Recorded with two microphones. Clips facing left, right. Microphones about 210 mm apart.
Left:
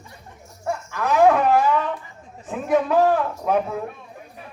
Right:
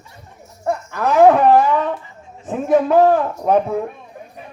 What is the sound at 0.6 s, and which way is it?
A man's voice, 40° right (ahead or behind).